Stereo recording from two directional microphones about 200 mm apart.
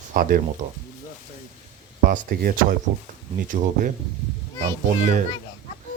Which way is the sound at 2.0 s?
40° right (ahead or behind).